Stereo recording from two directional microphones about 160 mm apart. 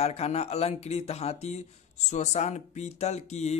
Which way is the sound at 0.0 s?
40° left (ahead or behind).